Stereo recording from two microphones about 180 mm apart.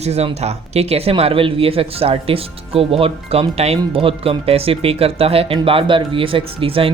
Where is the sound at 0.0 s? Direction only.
35° right (ahead or behind).